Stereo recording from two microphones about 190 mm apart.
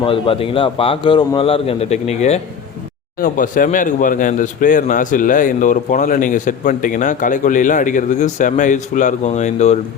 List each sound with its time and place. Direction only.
0.0 s a man's voice: 30° left (ahead or behind)
3.2 s a man's voice: 45° left (ahead or behind)